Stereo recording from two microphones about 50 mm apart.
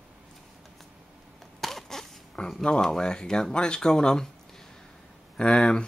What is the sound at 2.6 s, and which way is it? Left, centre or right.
Speech, centre.